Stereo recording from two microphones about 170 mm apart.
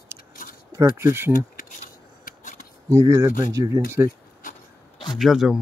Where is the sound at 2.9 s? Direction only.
15° right (ahead or behind).